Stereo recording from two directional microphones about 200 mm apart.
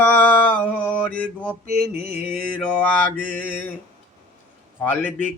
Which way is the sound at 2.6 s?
5° left (ahead or behind).